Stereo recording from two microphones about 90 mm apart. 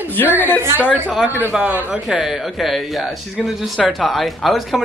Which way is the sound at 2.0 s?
5° right (ahead or behind).